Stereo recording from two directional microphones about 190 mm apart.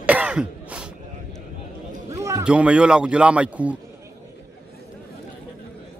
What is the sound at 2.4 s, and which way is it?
Speech, 5° right (ahead or behind).